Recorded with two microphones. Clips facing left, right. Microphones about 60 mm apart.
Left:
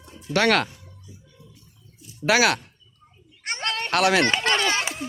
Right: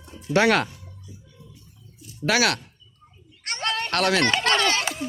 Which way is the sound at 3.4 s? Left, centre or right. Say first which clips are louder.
Left 1 dB; left.